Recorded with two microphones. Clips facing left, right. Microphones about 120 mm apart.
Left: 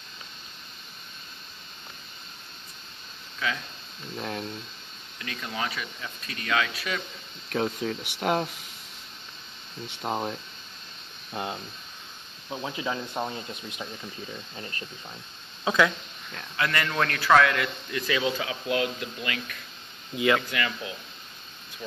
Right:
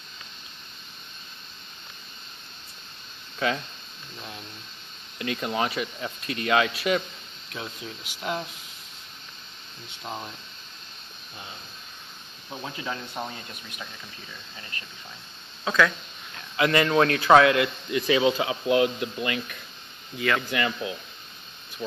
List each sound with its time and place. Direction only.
4.2 s speech: 55° left (ahead or behind)
5.2 s speech: 25° right (ahead or behind)
7.5 s speech: 50° left (ahead or behind)
10.0 s speech: 50° left (ahead or behind)
11.4 s speech: 90° left
12.4 s speech: 15° left (ahead or behind)
15.6 s speech: 20° left (ahead or behind)
16.5 s speech: 20° right (ahead or behind)
20.4 s speech: 30° right (ahead or behind)